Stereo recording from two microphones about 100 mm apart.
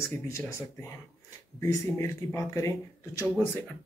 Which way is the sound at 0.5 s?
30° left (ahead or behind).